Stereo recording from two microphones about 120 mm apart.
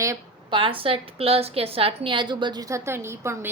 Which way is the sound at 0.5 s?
45° right (ahead or behind).